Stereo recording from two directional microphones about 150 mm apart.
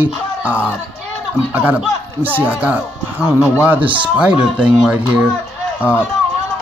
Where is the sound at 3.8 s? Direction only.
35° right (ahead or behind).